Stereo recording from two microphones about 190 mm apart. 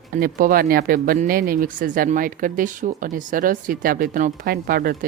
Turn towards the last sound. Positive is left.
turn(degrees=-50)  # may be behind; listen again after turning